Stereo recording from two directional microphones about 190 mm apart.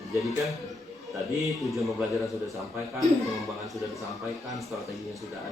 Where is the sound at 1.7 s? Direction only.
Centre (ahead or behind).